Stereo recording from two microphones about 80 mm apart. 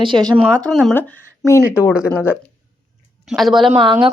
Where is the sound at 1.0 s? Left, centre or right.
Left.